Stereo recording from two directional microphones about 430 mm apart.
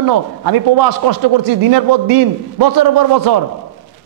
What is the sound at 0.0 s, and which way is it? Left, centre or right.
A man's voice, right.